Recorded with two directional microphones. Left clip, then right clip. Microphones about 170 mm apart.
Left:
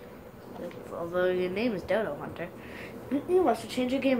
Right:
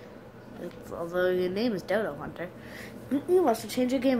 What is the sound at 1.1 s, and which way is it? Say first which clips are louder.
Speech: right 1 dB; 60° right (ahead or behind).